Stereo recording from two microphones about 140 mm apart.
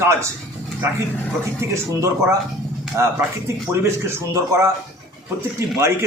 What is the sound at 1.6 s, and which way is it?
Speech, 20° right (ahead or behind).